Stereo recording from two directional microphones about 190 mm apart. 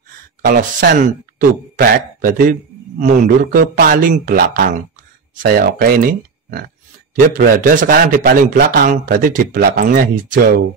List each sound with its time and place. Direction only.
0.4 s speech: 50° right (ahead or behind)